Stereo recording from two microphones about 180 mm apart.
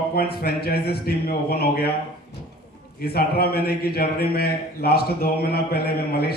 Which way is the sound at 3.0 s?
60° left (ahead or behind).